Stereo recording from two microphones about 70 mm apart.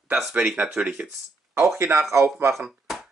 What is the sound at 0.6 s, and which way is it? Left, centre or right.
Speech, centre.